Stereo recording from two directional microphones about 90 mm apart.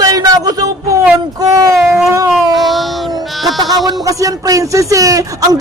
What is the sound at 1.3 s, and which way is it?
Speech, 45° right (ahead or behind).